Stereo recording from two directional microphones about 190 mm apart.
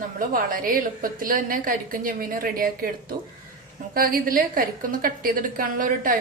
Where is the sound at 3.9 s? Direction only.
50° right (ahead or behind).